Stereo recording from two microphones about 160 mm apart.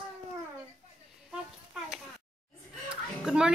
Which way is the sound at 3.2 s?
5° right (ahead or behind).